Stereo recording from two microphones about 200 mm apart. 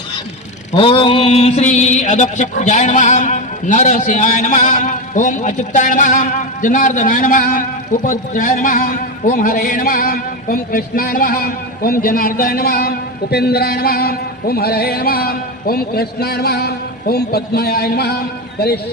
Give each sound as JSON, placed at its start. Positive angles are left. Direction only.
{"t": 0.7, "sound": "mantra", "side_deg": 25}
{"t": 8.0, "sound": "a man's voice", "side_deg": 40}